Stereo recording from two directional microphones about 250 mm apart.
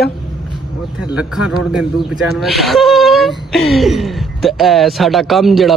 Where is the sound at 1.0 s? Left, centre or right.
Centre.